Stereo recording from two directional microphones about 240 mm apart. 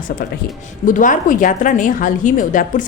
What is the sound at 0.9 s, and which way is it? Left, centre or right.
A woman's voice, left.